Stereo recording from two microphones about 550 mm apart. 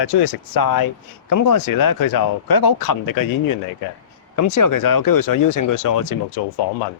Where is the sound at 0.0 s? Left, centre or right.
Left.